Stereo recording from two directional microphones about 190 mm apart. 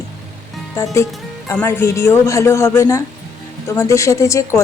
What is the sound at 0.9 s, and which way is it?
A woman's voice, 15° left (ahead or behind).